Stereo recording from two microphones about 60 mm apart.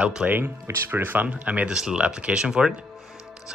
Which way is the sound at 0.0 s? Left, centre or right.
Centre.